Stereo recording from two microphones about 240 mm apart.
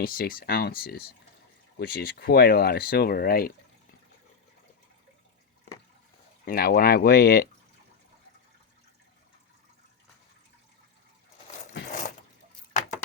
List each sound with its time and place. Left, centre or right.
0.0 s speech: left
6.4 s speech: left